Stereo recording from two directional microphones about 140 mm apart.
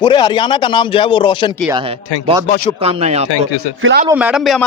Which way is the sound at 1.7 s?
35° right (ahead or behind).